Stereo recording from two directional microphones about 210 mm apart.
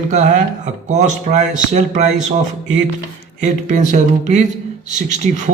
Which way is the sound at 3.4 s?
35° right (ahead or behind).